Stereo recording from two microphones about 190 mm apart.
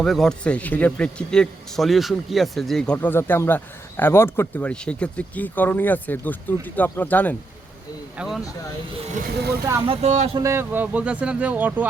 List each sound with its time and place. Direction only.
0.0 s a man's voice: centre (ahead or behind)
8.2 s speech: 5° right (ahead or behind)
9.8 s speech: 30° right (ahead or behind)
10.3 s speech: 15° right (ahead or behind)